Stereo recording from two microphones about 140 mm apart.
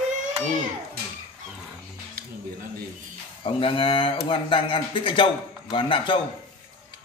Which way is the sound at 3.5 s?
40° left (ahead or behind).